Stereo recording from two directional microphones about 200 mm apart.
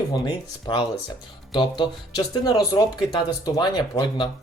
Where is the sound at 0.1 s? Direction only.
20° left (ahead or behind).